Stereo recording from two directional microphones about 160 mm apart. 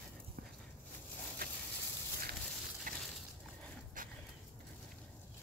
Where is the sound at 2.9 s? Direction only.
60° right (ahead or behind).